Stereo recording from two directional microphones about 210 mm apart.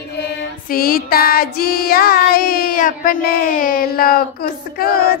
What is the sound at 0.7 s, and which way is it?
Child singing, 45° left (ahead or behind).